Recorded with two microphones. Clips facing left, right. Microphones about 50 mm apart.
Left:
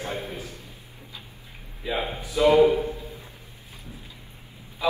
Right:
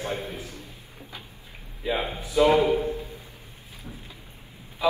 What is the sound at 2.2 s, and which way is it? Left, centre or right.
Speech, right.